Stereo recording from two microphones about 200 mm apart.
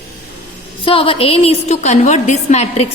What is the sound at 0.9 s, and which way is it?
A woman's voice, 25° left (ahead or behind).